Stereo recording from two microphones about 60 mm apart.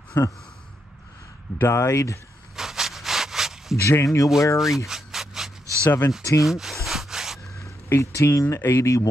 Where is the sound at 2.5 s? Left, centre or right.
Centre.